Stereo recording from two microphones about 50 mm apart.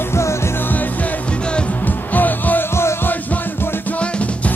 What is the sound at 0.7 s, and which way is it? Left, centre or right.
Music, left.